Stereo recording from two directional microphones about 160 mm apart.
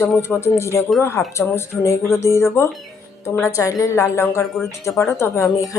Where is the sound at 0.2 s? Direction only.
15° left (ahead or behind).